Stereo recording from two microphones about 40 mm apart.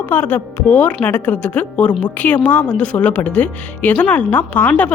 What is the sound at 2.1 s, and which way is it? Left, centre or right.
Speech, left.